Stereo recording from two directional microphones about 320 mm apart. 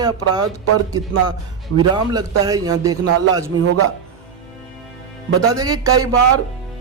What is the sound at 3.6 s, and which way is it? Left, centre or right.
Speech, right.